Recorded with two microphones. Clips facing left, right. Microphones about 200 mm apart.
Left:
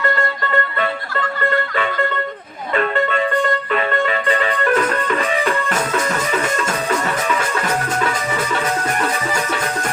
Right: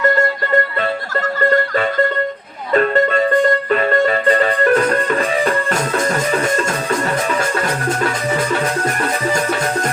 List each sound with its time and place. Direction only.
0.5 s music: 40° right (ahead or behind)
8.5 s music: 40° right (ahead or behind)